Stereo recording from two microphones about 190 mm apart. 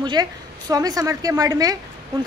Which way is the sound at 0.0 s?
20° right (ahead or behind).